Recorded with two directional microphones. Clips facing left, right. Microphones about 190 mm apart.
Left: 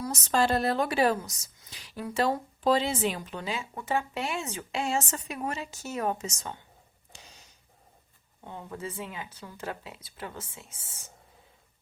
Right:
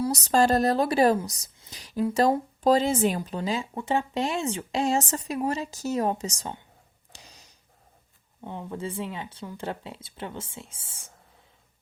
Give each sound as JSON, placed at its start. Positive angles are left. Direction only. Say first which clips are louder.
{"t": 0.0, "sound": "speech", "louder": "right 5 dB", "side_deg": -35}
{"t": 1.7, "sound": "speech", "louder": "right 7 dB", "side_deg": -40}
{"t": 3.2, "sound": "speech", "louder": "right 6 dB", "side_deg": -35}
{"t": 7.1, "sound": "a sound", "louder": "right 1 dB", "side_deg": -35}
{"t": 8.4, "sound": "speech", "louder": "right 4 dB", "side_deg": -25}